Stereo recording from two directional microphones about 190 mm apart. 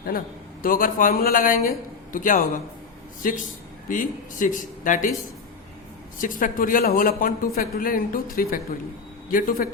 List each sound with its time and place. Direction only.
0.6 s speech: 45° left (ahead or behind)
6.1 s speech: 45° left (ahead or behind)